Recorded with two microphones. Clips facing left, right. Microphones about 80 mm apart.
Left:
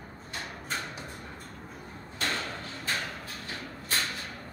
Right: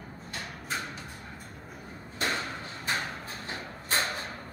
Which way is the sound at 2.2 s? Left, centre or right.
Centre.